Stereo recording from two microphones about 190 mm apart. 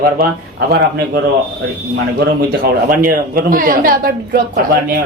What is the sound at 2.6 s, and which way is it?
Speech, 50° right (ahead or behind).